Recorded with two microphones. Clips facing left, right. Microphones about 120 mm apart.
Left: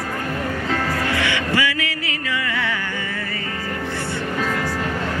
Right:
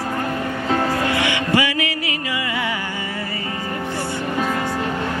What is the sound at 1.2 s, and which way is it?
Music, 15° right (ahead or behind).